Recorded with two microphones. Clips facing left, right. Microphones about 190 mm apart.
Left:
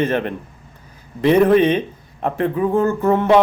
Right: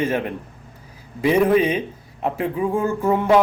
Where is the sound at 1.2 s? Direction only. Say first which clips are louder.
Left 4 dB; 10° right (ahead or behind).